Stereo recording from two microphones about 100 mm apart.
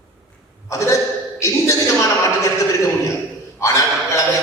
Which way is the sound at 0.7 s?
30° left (ahead or behind).